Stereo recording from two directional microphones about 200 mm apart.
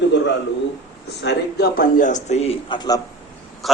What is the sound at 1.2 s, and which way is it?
A man's voice, 55° left (ahead or behind).